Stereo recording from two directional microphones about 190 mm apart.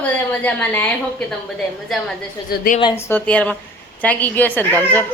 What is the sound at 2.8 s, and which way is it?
Speech, 25° left (ahead or behind).